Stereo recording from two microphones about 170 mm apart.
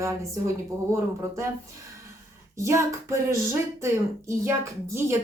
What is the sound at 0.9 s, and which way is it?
Speech, 15° right (ahead or behind).